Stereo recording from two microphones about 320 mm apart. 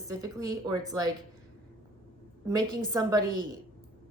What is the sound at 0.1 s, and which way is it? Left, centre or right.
A woman's voice, centre.